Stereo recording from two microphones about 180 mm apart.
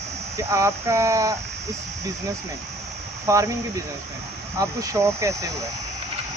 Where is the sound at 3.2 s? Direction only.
15° right (ahead or behind).